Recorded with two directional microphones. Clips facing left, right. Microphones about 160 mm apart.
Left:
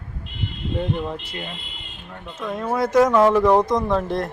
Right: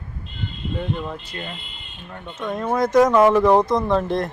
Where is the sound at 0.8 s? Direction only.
15° left (ahead or behind).